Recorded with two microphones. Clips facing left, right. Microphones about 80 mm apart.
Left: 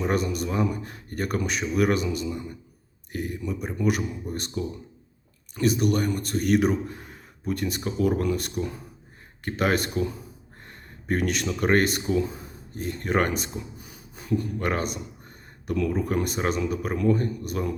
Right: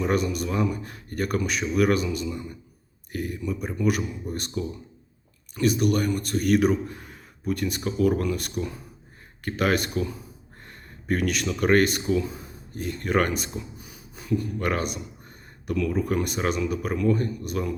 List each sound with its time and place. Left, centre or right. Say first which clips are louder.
0.0 s a man's voice: right 1 dB; left